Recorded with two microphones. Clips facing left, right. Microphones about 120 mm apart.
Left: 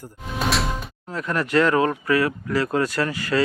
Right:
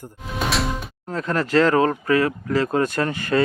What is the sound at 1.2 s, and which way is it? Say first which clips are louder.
Speech: right 2 dB; 30° right (ahead or behind).